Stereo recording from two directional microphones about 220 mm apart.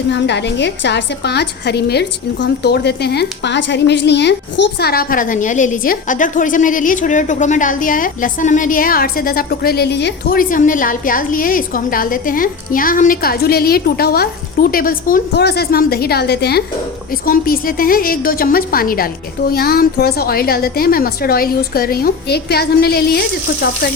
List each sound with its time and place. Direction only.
0.1 s a woman's voice: 50° left (ahead or behind)